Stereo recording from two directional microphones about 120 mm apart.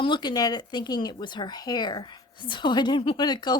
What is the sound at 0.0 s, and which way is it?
Speech, 40° left (ahead or behind).